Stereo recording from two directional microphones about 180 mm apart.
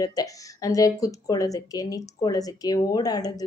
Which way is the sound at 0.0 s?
20° left (ahead or behind).